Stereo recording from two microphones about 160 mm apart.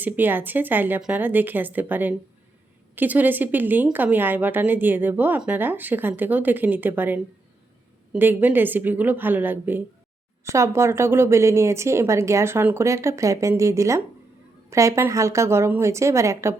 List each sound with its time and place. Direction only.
0.0 s a woman's voice: 10° right (ahead or behind)